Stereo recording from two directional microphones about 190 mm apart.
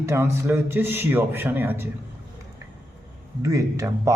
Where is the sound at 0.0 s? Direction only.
15° right (ahead or behind).